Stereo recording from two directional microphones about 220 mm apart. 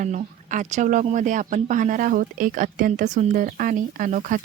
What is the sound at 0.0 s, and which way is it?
Speech, 35° right (ahead or behind).